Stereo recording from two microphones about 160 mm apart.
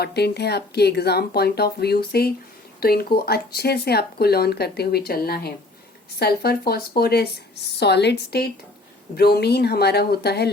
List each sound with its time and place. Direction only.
0.0 s speech: 90° left